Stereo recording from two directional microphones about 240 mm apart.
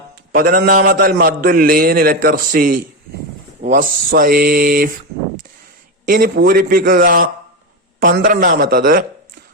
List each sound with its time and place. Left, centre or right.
0.3 s a man's voice: right
6.1 s a man's voice: right